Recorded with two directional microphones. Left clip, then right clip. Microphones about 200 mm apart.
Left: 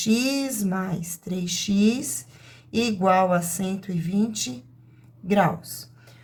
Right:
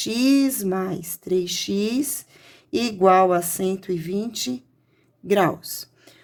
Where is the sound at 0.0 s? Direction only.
35° right (ahead or behind).